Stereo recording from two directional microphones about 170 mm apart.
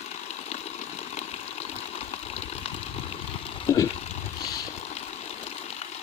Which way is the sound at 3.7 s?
20° left (ahead or behind).